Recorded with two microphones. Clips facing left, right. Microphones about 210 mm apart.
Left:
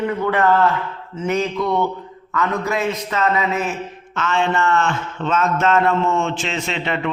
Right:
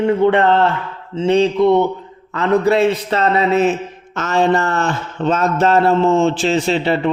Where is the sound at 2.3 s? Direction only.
30° right (ahead or behind).